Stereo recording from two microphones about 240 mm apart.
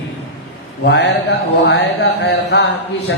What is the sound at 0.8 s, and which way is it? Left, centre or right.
Speech, left.